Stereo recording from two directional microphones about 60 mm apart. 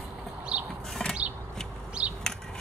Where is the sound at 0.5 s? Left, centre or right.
Right.